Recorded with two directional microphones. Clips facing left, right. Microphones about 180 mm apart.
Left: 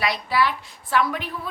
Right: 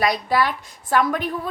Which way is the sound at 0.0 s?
45° right (ahead or behind).